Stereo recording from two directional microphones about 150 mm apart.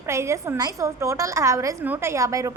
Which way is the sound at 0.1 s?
20° right (ahead or behind).